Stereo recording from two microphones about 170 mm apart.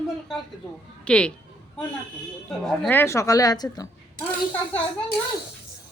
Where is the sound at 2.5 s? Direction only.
5° left (ahead or behind); by 3.9 s 25° left (ahead or behind).